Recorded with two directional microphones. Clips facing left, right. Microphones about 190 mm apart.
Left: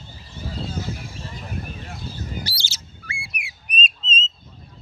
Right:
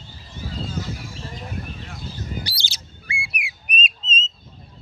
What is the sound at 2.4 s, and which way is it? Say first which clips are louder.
Bird: left 1 dB; 15° right (ahead or behind).